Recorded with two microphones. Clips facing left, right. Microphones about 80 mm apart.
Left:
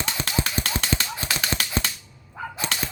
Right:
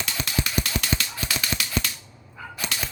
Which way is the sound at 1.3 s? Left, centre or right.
Left.